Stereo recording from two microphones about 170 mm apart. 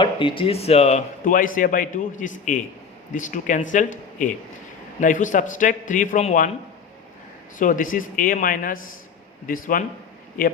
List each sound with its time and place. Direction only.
0.0 s speech: 30° left (ahead or behind); by 6.5 s 45° left (ahead or behind)
7.6 s speech: 50° left (ahead or behind)